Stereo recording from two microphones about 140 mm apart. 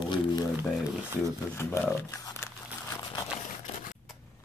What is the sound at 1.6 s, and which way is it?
Speech, 15° left (ahead or behind).